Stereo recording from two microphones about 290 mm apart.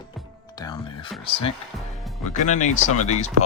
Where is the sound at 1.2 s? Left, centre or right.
Centre.